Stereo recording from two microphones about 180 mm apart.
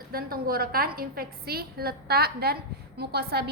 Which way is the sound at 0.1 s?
55° right (ahead or behind).